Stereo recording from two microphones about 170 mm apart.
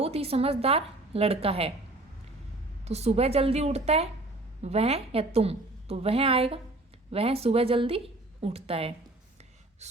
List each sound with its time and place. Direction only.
0.0 s a woman's voice: 35° right (ahead or behind)
2.8 s a woman's voice: 40° right (ahead or behind)
9.8 s gasp: 40° right (ahead or behind)